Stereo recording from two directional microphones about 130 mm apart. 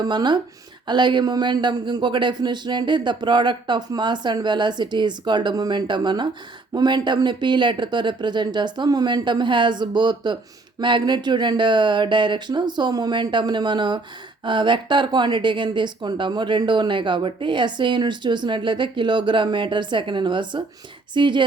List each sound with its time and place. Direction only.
0.0 s speech: 35° right (ahead or behind)